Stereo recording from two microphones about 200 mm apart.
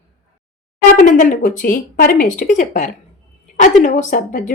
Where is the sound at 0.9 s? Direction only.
40° left (ahead or behind).